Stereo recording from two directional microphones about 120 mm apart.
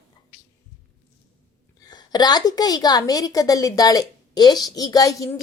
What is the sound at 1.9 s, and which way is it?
A woman's voice, 35° left (ahead or behind).